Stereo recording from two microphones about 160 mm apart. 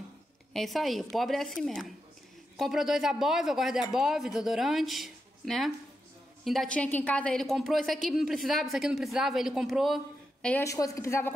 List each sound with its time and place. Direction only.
0.5 s a woman's voice: centre (ahead or behind)
10.5 s a woman's voice: 20° left (ahead or behind)